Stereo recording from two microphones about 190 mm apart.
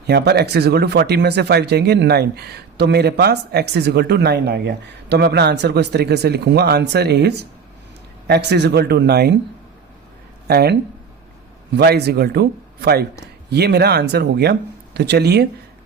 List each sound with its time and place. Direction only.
0.1 s speech: 60° right (ahead or behind)
10.5 s speech: 55° right (ahead or behind)
11.8 s speech: 60° right (ahead or behind)